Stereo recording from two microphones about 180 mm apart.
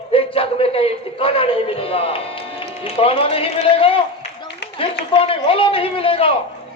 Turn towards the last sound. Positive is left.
turn(degrees=30)  # may be behind; listen again after turning